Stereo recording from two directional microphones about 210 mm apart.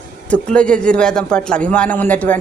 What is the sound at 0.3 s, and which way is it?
A man's voice, 5° left (ahead or behind).